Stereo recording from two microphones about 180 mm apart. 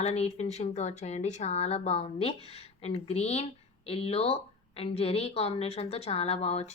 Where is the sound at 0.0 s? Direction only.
35° left (ahead or behind).